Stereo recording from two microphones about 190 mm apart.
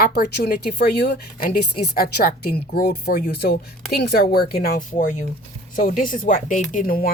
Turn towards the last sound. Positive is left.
turn(degrees=50)  # may be behind; listen again after turning